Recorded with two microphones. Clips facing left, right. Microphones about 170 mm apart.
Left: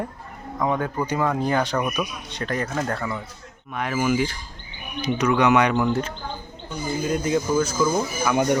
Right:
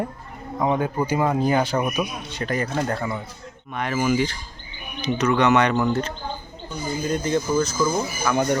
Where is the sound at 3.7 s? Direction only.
5° left (ahead or behind).